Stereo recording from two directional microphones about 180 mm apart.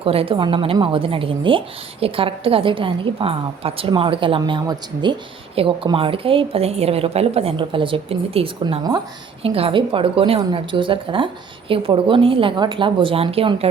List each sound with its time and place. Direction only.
0.0 s a woman's voice: 30° right (ahead or behind)